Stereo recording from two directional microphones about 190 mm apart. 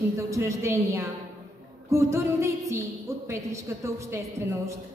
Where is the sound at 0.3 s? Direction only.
15° right (ahead or behind).